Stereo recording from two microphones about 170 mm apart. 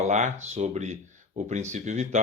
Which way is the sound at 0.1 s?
45° right (ahead or behind).